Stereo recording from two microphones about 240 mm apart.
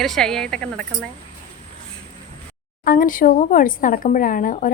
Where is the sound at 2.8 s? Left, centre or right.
Left.